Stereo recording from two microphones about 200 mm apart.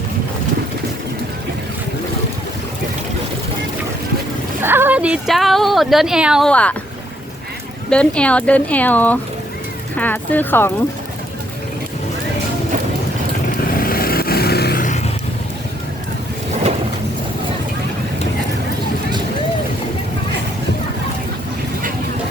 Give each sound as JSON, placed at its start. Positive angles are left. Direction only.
{"t": 4.6, "sound": "speech", "side_deg": -10}
{"t": 7.9, "sound": "speech", "side_deg": 5}
{"t": 13.7, "sound": "vehicle", "side_deg": 45}